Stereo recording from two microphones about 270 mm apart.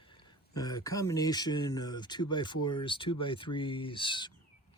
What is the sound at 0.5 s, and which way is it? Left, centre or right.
Speech, centre.